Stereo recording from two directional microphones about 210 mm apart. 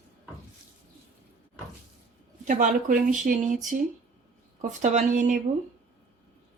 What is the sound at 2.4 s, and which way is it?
Speech, 35° right (ahead or behind).